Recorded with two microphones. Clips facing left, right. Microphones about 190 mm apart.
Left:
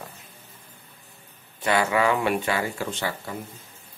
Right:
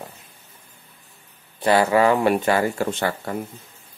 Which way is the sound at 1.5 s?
35° right (ahead or behind).